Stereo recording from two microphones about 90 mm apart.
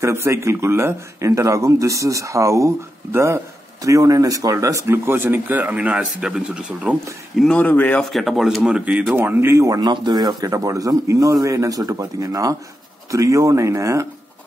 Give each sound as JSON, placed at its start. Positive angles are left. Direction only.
{"t": 0.0, "sound": "speech", "side_deg": -30}
{"t": 7.5, "sound": "speech", "side_deg": 15}
{"t": 8.0, "sound": "speech", "side_deg": 0}
{"t": 8.6, "sound": "speech", "side_deg": -15}
{"t": 9.1, "sound": "speech", "side_deg": -25}
{"t": 9.8, "sound": "speech", "side_deg": -50}